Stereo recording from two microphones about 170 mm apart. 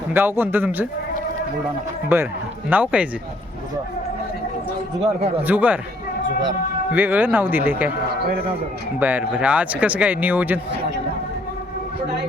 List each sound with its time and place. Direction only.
0.1 s speech: 10° right (ahead or behind)
2.1 s speech: 15° right (ahead or behind)
5.4 s speech: 10° right (ahead or behind)
6.9 s speech: 10° right (ahead or behind)
8.2 s a man's voice: 65° right (ahead or behind)
9.0 s speech: 10° right (ahead or behind)